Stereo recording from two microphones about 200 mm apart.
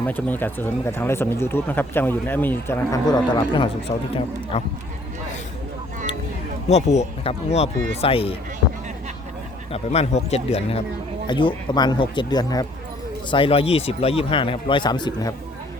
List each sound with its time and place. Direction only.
0.0 s speech: 10° left (ahead or behind); by 4.7 s 30° left (ahead or behind)
6.7 s speech: 35° left (ahead or behind)
9.7 s speech: 30° left (ahead or behind)